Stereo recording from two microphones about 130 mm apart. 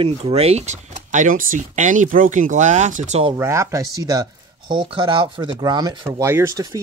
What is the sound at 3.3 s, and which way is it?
Speech, 20° right (ahead or behind).